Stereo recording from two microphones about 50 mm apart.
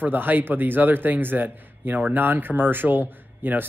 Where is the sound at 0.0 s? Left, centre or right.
Right.